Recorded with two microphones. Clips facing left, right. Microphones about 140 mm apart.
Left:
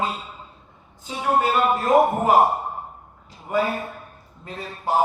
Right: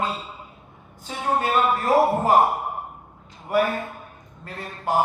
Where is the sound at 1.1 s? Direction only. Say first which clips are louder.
Left 2 dB; 20° left (ahead or behind).